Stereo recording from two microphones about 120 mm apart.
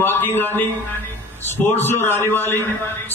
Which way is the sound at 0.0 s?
15° left (ahead or behind).